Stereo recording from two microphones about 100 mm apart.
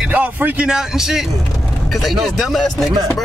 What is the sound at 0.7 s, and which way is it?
Speech, 5° right (ahead or behind).